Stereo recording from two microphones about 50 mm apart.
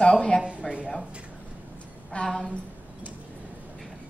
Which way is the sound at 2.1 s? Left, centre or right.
Left.